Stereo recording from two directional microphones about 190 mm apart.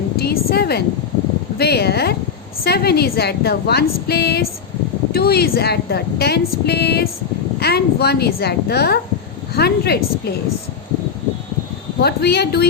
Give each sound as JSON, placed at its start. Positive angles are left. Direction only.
{"t": 0.2, "sound": "a sound", "side_deg": 55}
{"t": 1.5, "sound": "a woman's voice", "side_deg": 60}
{"t": 11.9, "sound": "a woman's voice", "side_deg": 60}